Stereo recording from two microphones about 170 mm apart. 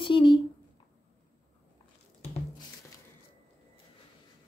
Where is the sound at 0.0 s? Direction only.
30° left (ahead or behind).